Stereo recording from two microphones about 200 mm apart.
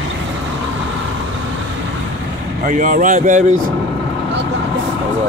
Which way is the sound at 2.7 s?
40° right (ahead or behind).